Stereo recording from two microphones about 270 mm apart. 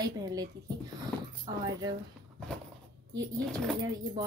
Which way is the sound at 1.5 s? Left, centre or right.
Centre.